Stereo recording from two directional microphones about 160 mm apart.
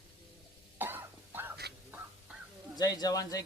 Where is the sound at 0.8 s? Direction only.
10° right (ahead or behind).